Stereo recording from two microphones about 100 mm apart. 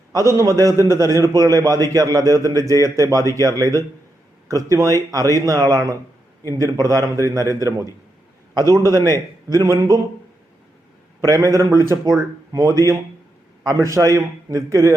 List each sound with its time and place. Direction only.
0.3 s speech: 30° right (ahead or behind)
9.0 s a man's voice: 30° left (ahead or behind)
9.5 s speech: 35° right (ahead or behind)
11.3 s speech: 30° right (ahead or behind)